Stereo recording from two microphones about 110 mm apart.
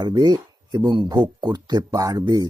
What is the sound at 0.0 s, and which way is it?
Speech, 40° right (ahead or behind).